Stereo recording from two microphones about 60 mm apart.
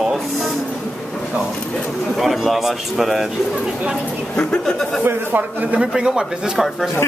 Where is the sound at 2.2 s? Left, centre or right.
Centre.